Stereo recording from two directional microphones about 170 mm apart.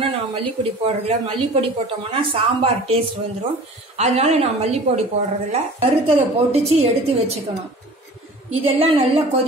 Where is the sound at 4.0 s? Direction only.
40° right (ahead or behind).